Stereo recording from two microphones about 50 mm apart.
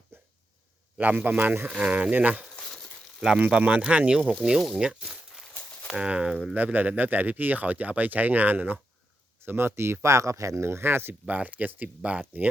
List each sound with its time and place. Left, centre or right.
0.1 s hiccup: right
0.9 s speech: right
2.6 s a sound: centre
3.2 s speech: centre
6.5 s speech: right
9.4 s speech: right
10.6 s speech: right
11.1 s speech: right